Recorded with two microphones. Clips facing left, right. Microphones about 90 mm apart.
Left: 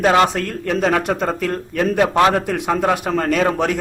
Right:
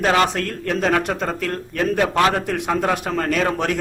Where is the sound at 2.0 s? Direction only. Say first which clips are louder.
Left 3 dB; 25° left (ahead or behind).